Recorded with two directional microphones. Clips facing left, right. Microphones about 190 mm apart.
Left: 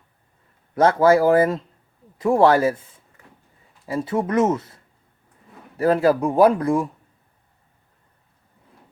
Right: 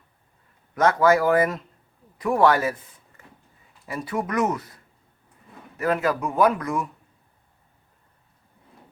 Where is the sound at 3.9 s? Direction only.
25° left (ahead or behind).